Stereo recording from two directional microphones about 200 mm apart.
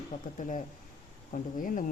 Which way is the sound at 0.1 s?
40° left (ahead or behind).